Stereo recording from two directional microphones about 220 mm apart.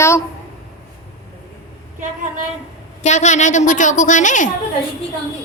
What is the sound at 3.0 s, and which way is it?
A woman's voice, 30° left (ahead or behind).